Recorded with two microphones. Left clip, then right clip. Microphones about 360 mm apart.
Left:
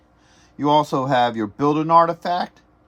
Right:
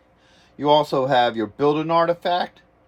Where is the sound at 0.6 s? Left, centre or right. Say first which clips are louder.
Even; left.